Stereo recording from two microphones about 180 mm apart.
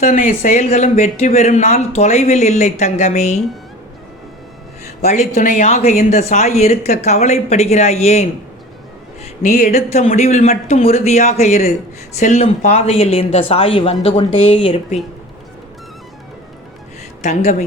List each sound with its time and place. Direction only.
0.0 s speech: 45° left (ahead or behind)
5.0 s speech: 40° left (ahead or behind)
9.4 s music: 45° left (ahead or behind)
10.2 s speech: 35° left (ahead or behind)
17.2 s speech: 40° left (ahead or behind)